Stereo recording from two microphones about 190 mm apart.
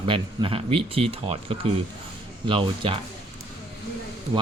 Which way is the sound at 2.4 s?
25° right (ahead or behind).